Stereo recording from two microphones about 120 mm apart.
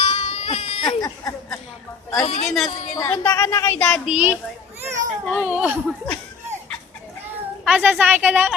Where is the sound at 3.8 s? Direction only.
10° left (ahead or behind).